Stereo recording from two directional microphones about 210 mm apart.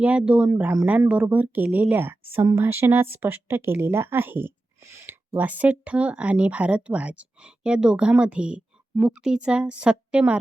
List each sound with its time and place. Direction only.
0.0 s speech: 5° right (ahead or behind)